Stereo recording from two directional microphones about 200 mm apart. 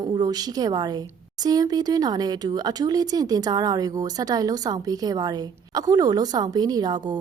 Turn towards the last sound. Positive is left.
turn(degrees=-20)  # may be behind; listen again after turning